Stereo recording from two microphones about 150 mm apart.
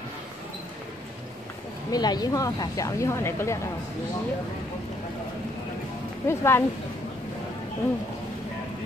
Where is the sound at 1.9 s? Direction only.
25° left (ahead or behind).